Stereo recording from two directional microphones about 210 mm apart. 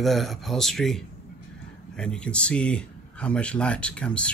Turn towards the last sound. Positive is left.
turn(degrees=5)  # may be behind; listen again after turning